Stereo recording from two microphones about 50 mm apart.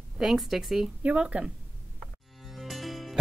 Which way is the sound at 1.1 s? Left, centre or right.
Right.